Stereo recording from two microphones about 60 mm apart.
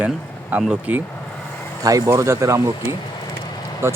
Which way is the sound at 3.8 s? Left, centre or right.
Right.